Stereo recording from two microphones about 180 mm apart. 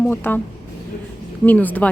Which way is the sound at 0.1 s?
10° left (ahead or behind).